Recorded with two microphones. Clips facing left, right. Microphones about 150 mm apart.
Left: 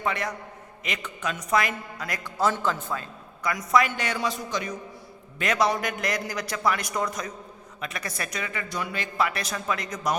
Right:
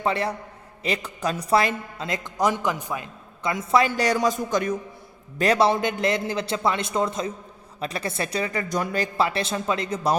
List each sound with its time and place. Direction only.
0.0 s a man's voice: 30° right (ahead or behind); by 4.7 s 50° right (ahead or behind)
5.4 s a woman's voice: 30° right (ahead or behind)